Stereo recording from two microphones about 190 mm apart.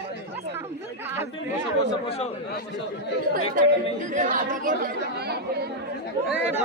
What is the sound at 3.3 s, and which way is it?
Speech, 45° right (ahead or behind).